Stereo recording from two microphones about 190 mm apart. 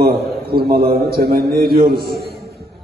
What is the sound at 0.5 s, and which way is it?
A man's voice, 55° right (ahead or behind).